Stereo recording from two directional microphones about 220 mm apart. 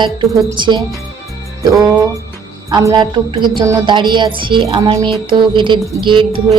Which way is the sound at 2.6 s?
15° right (ahead or behind).